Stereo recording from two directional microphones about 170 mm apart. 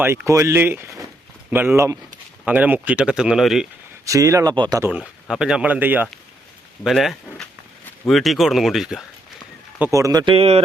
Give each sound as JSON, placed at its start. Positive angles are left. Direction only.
{"t": 0.0, "sound": "speech", "side_deg": -10}
{"t": 4.0, "sound": "speech", "side_deg": -20}
{"t": 4.8, "sound": "speech", "side_deg": -5}
{"t": 6.8, "sound": "speech", "side_deg": 0}
{"t": 9.7, "sound": "speech", "side_deg": -15}